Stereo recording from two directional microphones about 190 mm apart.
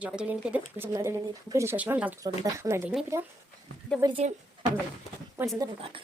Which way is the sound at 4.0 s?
25° right (ahead or behind).